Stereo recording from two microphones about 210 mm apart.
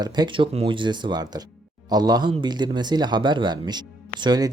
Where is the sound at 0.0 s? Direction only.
20° right (ahead or behind).